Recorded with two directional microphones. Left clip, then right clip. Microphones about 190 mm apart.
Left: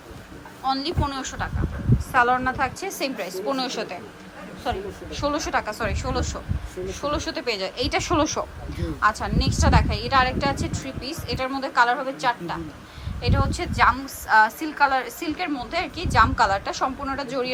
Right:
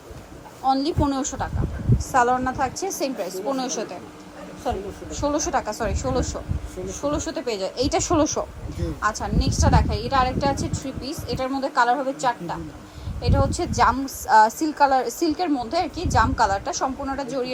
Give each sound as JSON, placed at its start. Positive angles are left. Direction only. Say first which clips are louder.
{"t": 0.6, "sound": "a woman's voice", "louder": "right 4 dB", "side_deg": -25}